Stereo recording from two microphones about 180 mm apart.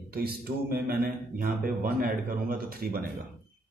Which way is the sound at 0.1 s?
55° right (ahead or behind).